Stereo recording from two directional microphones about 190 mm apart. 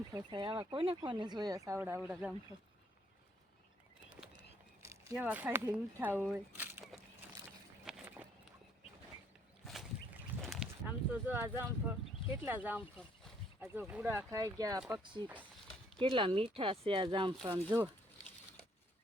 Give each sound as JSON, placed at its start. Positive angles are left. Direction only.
{"t": 0.1, "sound": "speech", "side_deg": -20}
{"t": 4.8, "sound": "speech", "side_deg": -15}
{"t": 7.9, "sound": "walk", "side_deg": -5}
{"t": 10.5, "sound": "speech", "side_deg": -5}
{"t": 17.7, "sound": "speech", "side_deg": -10}